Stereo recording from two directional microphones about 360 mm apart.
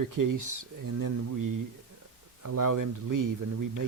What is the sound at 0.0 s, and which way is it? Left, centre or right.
Speech, right.